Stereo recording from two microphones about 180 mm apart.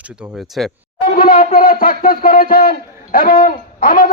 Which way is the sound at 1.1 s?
50° left (ahead or behind).